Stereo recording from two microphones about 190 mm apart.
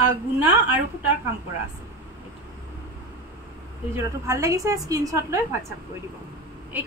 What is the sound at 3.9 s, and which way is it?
A woman's voice, 15° right (ahead or behind).